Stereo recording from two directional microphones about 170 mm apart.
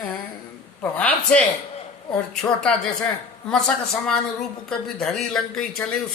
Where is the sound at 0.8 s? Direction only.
10° left (ahead or behind).